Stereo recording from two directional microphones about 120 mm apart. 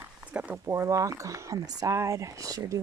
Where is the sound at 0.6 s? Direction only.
25° right (ahead or behind).